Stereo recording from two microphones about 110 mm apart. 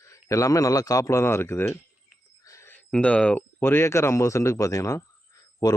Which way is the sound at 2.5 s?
25° left (ahead or behind).